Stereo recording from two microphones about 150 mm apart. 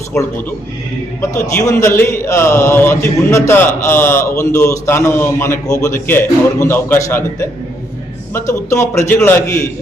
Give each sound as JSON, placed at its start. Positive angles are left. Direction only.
{"t": 1.2, "sound": "a man's voice", "side_deg": 20}
{"t": 8.4, "sound": "a man's voice", "side_deg": 20}